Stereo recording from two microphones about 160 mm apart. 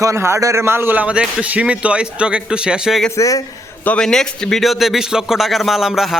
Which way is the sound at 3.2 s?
20° left (ahead or behind).